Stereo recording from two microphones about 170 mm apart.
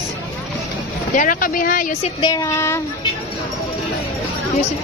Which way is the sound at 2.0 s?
25° left (ahead or behind).